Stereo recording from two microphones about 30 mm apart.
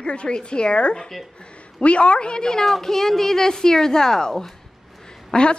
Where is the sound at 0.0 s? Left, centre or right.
Left.